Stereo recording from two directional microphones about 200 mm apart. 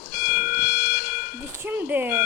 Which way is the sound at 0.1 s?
45° left (ahead or behind).